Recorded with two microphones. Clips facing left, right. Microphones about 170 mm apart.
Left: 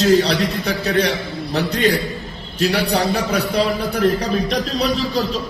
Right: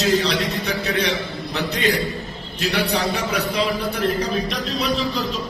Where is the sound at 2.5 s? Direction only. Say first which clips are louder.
Left 4 dB; 35° left (ahead or behind).